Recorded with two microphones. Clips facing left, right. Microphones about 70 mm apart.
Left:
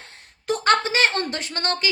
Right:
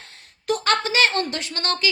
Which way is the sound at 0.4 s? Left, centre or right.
Left.